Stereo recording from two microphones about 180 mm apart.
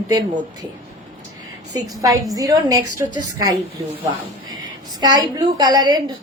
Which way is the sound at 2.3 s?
20° right (ahead or behind).